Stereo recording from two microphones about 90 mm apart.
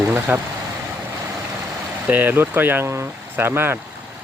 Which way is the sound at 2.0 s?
20° right (ahead or behind).